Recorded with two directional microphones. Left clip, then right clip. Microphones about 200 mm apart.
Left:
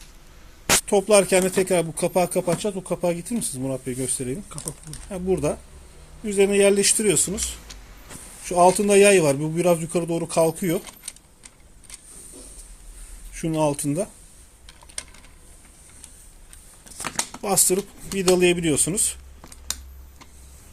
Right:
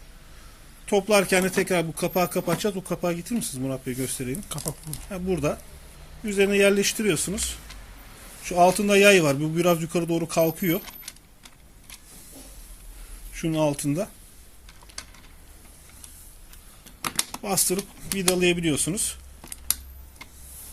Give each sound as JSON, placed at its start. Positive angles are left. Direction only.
{"t": 0.9, "sound": "speech", "side_deg": 20}
{"t": 2.6, "sound": "speech", "side_deg": 0}
{"t": 13.3, "sound": "speech", "side_deg": 20}
{"t": 17.4, "sound": "speech", "side_deg": 20}